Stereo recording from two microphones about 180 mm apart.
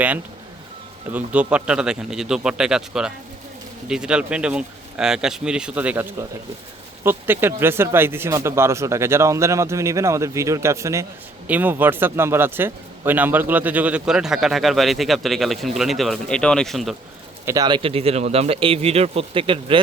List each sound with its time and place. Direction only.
1.1 s a man's voice: 5° right (ahead or behind)
17.4 s speech: 20° right (ahead or behind)